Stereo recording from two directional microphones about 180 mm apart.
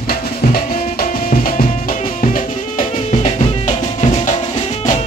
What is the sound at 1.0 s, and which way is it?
Music, 50° left (ahead or behind).